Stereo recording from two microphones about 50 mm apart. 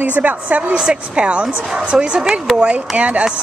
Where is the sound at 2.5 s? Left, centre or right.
Right.